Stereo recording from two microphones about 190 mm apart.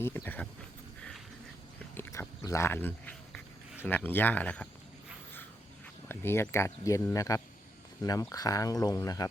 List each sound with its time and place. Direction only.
0.1 s speech: 10° left (ahead or behind)
2.0 s a sound: 15° left (ahead or behind)
2.4 s speech: 15° left (ahead or behind)
6.1 s speech: 10° left (ahead or behind)